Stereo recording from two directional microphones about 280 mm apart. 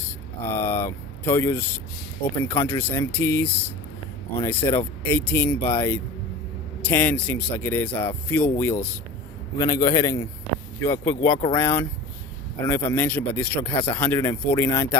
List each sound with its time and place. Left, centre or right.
0.4 s speech: centre
11.0 s speech: left
11.5 s speech: centre